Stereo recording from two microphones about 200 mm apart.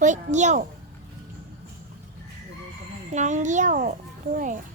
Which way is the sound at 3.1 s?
35° right (ahead or behind).